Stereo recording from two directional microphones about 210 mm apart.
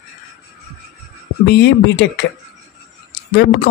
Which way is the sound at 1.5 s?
55° left (ahead or behind).